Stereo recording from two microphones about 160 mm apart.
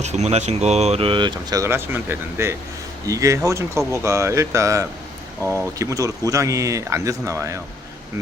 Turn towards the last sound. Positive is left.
turn(degrees=-20)  # may be behind; listen again after turning